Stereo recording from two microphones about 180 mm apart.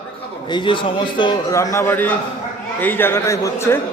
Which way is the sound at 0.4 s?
25° left (ahead or behind).